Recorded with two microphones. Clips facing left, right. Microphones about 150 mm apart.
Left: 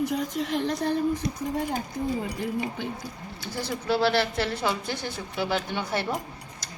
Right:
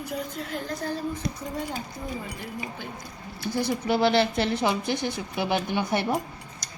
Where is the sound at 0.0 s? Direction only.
85° left.